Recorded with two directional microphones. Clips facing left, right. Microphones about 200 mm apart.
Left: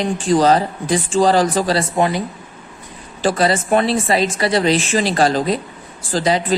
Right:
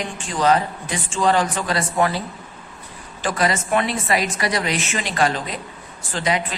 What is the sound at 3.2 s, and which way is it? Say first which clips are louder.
Speech: left 5 dB; 30° left (ahead or behind).